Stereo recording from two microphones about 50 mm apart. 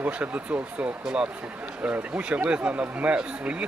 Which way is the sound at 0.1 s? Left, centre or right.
Right.